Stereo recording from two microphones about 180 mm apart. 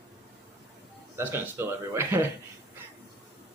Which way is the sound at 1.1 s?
15° right (ahead or behind).